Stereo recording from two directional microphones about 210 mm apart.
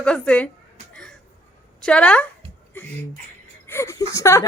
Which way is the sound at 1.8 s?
5° left (ahead or behind).